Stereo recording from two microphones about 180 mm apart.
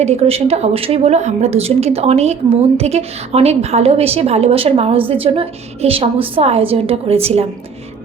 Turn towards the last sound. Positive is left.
turn(degrees=-35)  # may be behind; listen again after turning